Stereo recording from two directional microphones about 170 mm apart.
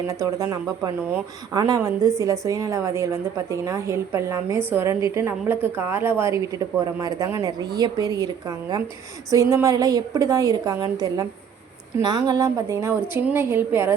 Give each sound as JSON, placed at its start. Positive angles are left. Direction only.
{"t": 0.1, "sound": "a woman's voice", "side_deg": -20}